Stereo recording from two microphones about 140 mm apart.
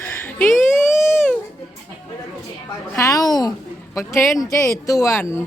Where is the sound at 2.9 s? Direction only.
25° left (ahead or behind).